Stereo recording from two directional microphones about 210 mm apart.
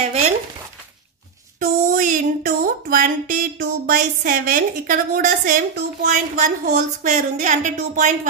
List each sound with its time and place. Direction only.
1.6 s speech: 40° right (ahead or behind)